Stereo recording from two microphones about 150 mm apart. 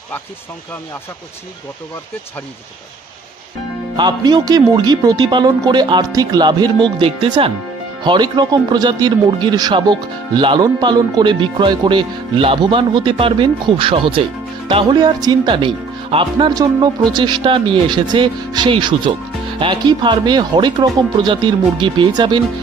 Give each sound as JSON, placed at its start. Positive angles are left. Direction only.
{"t": 3.9, "sound": "speech", "side_deg": -30}